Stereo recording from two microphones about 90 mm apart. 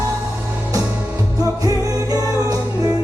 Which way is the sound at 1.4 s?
40° right (ahead or behind).